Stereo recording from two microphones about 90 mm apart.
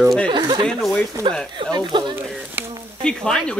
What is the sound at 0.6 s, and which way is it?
Speech, 5° left (ahead or behind).